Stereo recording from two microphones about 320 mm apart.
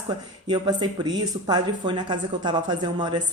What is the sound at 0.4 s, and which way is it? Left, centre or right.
Speech, centre.